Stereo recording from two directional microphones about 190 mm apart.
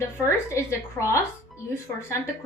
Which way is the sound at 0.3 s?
15° left (ahead or behind).